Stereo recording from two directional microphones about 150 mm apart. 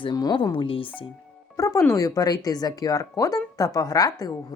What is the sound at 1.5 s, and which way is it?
Speech, 20° left (ahead or behind).